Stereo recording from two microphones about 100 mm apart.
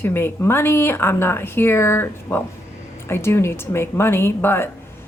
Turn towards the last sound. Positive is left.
turn(degrees=25)  # may be behind; listen again after turning